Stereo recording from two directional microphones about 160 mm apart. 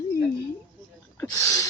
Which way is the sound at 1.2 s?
20° left (ahead or behind).